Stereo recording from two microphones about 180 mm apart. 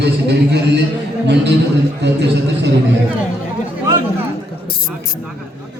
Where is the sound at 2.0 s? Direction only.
70° right (ahead or behind).